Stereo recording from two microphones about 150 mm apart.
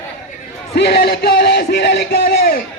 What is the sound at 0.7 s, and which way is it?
Music, 90° left.